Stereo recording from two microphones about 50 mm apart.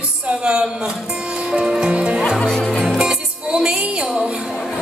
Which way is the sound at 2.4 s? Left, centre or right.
Centre.